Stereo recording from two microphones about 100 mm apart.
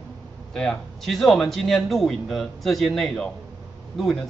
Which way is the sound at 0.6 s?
5° left (ahead or behind).